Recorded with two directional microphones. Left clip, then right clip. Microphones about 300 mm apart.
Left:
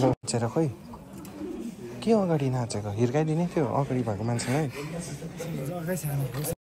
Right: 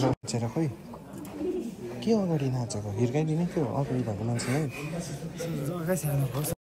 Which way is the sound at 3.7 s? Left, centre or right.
Centre.